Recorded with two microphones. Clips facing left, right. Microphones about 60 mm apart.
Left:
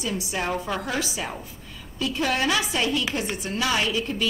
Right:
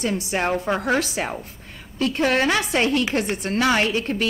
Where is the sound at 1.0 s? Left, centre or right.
Right.